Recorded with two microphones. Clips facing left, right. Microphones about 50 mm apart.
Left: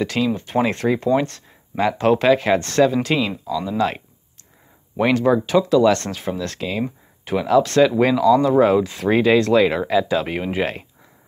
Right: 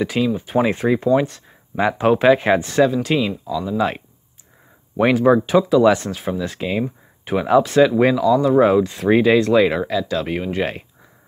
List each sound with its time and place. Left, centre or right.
0.0 s speech: centre
2.6 s speech: centre
6.8 s a sound: centre
7.6 s speech: centre
9.9 s speech: centre
10.2 s speech: centre